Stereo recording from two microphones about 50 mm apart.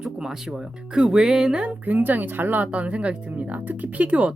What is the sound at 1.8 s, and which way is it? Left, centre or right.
Speech, right.